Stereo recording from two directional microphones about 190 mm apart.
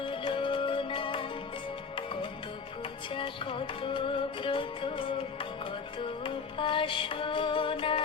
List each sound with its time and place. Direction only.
0.0 s music: 25° left (ahead or behind)
3.1 s music: 25° left (ahead or behind)